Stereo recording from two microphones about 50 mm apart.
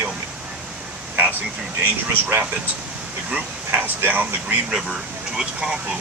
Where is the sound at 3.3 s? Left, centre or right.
Right.